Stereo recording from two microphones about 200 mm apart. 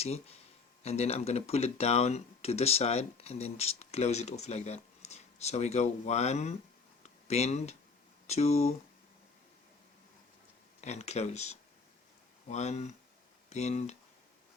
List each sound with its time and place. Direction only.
0.0 s speech: 30° left (ahead or behind)
7.0 s a sound: 35° left (ahead or behind)
8.3 s speech: 35° left (ahead or behind)
10.8 s speech: 35° left (ahead or behind)